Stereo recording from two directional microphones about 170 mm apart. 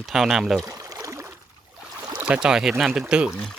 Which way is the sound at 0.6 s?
20° right (ahead or behind).